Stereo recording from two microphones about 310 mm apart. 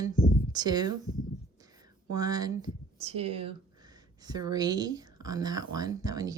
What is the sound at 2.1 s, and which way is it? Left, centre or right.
Speech, centre.